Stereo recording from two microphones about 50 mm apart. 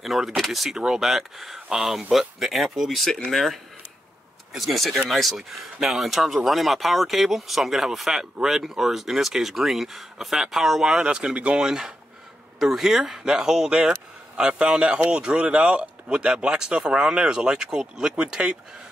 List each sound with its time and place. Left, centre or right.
0.0 s speech: centre
0.7 s speech: centre
11.6 s speech: centre